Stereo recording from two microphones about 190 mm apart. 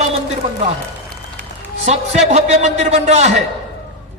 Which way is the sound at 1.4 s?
35° right (ahead or behind).